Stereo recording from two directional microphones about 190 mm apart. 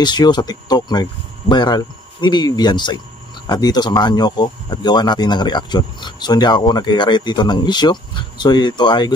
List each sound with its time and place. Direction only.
0.0 s speech: 20° left (ahead or behind)